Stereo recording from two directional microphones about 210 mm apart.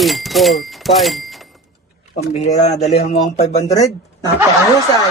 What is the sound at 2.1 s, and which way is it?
Speech, 30° left (ahead or behind).